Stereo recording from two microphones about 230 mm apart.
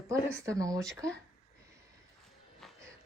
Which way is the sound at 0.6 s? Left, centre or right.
Centre.